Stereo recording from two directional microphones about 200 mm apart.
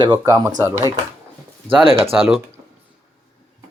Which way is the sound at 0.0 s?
20° right (ahead or behind).